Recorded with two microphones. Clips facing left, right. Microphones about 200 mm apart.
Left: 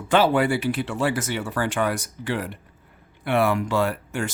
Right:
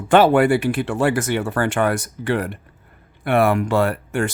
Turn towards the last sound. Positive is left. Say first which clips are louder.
# right 5 dB
turn(degrees=-55)  # may be behind; listen again after turning